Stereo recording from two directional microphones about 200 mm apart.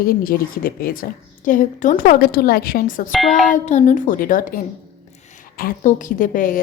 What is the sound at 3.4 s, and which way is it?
A woman's voice, 35° left (ahead or behind).